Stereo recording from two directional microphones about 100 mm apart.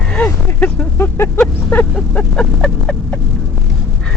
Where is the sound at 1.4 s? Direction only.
15° left (ahead or behind).